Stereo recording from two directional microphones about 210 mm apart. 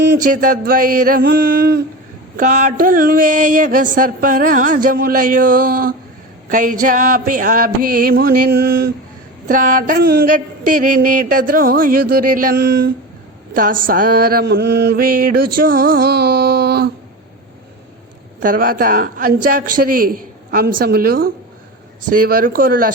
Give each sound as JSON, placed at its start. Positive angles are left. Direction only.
{"t": 0.0, "sound": "mantra", "side_deg": -40}
{"t": 2.3, "sound": "a sound", "side_deg": -40}
{"t": 8.2, "sound": "mantra", "side_deg": -45}
{"t": 9.5, "sound": "a sound", "side_deg": -40}
{"t": 13.5, "sound": "mantra", "side_deg": -40}
{"t": 18.3, "sound": "mantra", "side_deg": -40}